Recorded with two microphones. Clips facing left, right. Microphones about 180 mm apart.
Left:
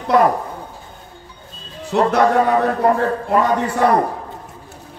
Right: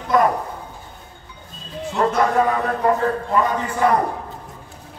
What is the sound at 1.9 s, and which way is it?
Speech, 60° left (ahead or behind).